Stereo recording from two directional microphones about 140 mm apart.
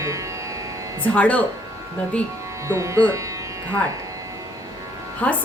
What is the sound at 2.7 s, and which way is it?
Speech, 20° right (ahead or behind).